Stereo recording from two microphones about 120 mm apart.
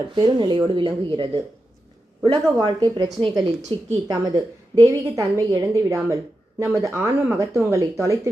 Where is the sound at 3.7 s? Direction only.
45° right (ahead or behind).